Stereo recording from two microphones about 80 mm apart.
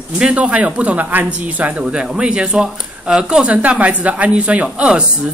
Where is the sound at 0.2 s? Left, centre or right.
Centre.